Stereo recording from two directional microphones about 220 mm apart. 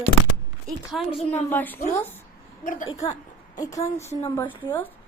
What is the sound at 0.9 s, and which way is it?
Speech, centre (ahead or behind).